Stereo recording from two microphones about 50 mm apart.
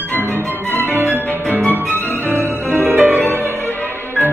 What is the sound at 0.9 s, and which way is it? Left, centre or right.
Music, right.